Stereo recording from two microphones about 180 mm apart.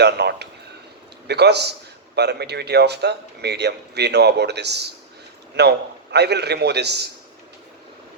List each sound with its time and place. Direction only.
0.0 s speech: 65° right (ahead or behind)